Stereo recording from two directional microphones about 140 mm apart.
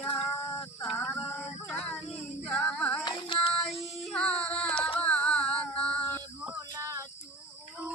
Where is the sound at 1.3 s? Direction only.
5° left (ahead or behind).